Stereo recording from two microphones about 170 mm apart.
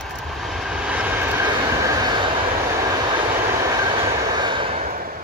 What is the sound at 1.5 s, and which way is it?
Train, 25° right (ahead or behind).